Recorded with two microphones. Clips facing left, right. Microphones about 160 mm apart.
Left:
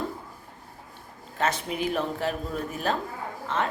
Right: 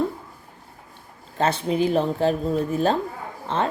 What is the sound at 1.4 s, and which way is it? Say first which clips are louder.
A woman's voice: right 6 dB; 30° right (ahead or behind).